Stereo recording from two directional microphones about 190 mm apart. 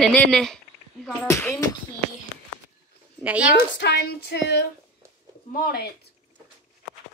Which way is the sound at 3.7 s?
65° left (ahead or behind).